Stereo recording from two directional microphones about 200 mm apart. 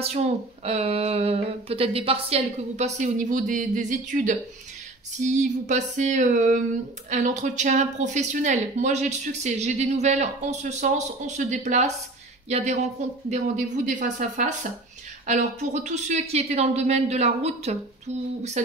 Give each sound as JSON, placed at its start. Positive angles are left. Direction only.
{"t": 0.0, "sound": "speech", "side_deg": -30}